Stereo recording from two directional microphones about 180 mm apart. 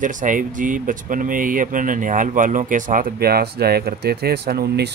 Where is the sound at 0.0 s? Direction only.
45° right (ahead or behind).